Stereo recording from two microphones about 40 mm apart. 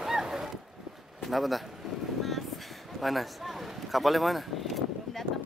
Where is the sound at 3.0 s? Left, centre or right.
Centre.